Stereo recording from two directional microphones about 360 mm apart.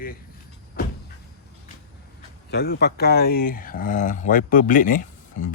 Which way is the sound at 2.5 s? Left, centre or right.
Left.